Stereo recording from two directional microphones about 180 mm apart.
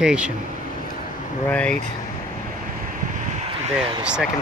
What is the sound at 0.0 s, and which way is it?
Speech, 5° right (ahead or behind).